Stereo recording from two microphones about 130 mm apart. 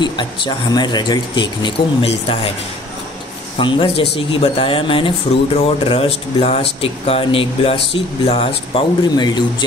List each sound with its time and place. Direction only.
0.0 s speech: 35° left (ahead or behind)
3.5 s speech: 40° left (ahead or behind)
9.1 s speech: 35° left (ahead or behind)